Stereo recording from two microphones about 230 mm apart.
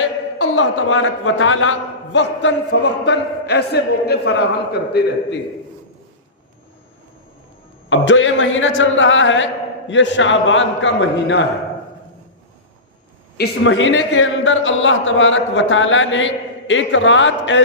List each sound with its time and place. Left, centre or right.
0.5 s a man's voice: left
7.9 s a man's voice: left
13.3 s a man's voice: left